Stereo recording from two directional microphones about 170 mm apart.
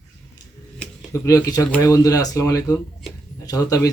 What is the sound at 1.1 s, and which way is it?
Speech, 20° left (ahead or behind).